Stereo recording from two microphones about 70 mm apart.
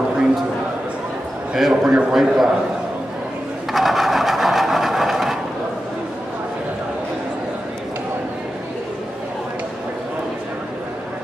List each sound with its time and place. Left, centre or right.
1.5 s a man's voice: centre
3.7 s wood: centre